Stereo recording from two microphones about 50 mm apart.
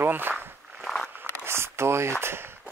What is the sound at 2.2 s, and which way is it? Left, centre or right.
Speech, right.